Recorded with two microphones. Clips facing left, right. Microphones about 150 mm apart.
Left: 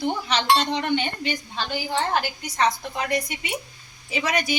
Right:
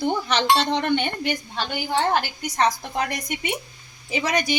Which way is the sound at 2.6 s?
45° right (ahead or behind).